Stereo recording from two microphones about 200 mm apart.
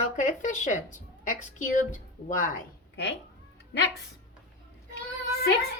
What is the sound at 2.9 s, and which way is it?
Speech, 55° left (ahead or behind).